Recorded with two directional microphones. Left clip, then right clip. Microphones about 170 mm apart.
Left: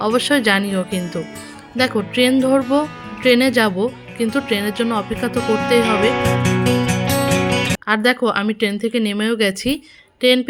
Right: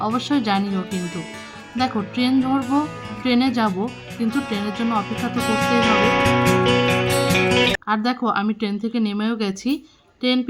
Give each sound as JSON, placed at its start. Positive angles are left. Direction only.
{"t": 0.0, "sound": "a woman's voice", "side_deg": 20}
{"t": 2.1, "sound": "a woman's voice", "side_deg": 20}
{"t": 5.4, "sound": "music", "side_deg": 0}
{"t": 7.9, "sound": "a woman's voice", "side_deg": 20}